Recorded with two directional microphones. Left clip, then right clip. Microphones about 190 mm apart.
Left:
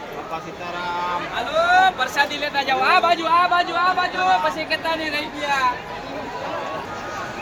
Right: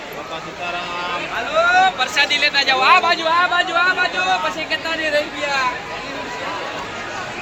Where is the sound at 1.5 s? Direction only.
30° left (ahead or behind); by 3.8 s 65° left (ahead or behind).